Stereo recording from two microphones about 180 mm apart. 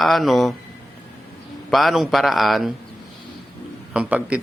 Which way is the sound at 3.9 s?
5° right (ahead or behind).